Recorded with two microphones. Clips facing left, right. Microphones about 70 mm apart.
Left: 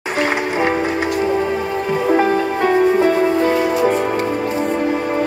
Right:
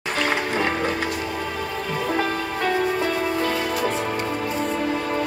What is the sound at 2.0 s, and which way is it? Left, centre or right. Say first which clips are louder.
Music: left 10 dB; left.